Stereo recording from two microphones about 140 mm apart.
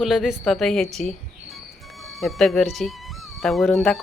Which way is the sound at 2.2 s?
Centre (ahead or behind).